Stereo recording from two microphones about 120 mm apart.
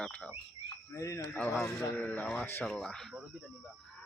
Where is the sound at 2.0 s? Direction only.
10° left (ahead or behind).